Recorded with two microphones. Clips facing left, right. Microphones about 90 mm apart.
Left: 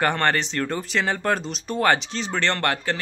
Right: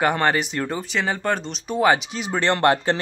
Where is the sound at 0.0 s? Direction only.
5° right (ahead or behind).